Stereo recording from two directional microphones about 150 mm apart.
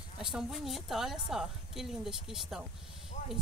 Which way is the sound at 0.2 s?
5° right (ahead or behind).